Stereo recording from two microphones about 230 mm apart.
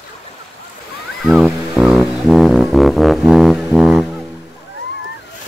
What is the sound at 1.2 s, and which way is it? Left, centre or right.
Music, centre.